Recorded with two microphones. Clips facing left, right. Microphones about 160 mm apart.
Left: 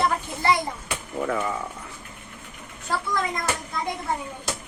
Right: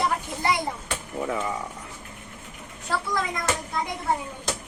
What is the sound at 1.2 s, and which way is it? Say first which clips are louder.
Speech: left 2 dB; 15° right (ahead or behind).